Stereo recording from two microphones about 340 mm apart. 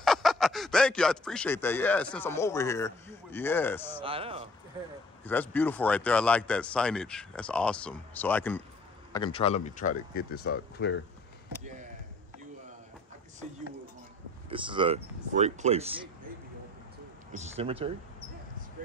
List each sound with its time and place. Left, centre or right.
0.0 s speech: centre
4.0 s speech: centre
5.2 s speech: centre; by 11.0 s left
14.5 s speech: centre
17.3 s speech: centre